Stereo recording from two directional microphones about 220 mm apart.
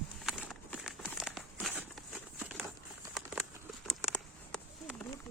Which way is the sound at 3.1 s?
5° right (ahead or behind).